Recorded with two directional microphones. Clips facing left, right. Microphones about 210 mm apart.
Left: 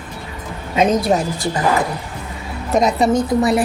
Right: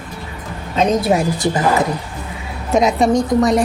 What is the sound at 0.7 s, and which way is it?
Speech, 5° left (ahead or behind).